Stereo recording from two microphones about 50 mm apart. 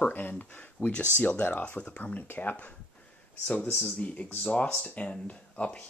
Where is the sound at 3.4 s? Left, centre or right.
Left.